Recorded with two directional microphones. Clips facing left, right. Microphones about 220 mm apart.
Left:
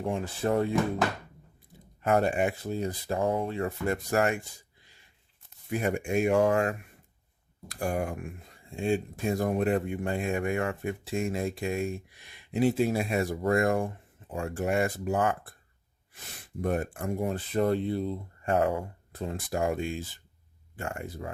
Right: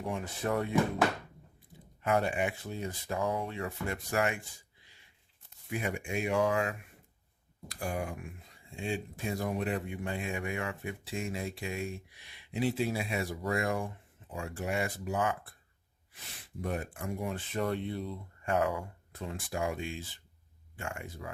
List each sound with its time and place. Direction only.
0.0 s speech: 30° left (ahead or behind)
2.0 s speech: 45° left (ahead or behind)
3.6 s speech: 45° left (ahead or behind)
5.7 s speech: 45° left (ahead or behind)